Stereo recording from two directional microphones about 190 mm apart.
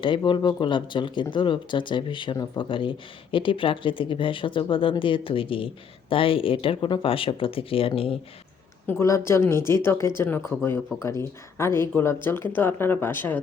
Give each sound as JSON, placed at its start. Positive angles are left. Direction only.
{"t": 0.3, "sound": "speech", "side_deg": 25}
{"t": 8.9, "sound": "speech", "side_deg": 15}